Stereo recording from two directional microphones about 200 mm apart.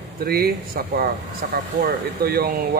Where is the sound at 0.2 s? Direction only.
50° right (ahead or behind).